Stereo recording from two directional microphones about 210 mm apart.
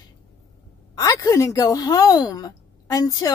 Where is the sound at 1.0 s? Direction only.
15° left (ahead or behind).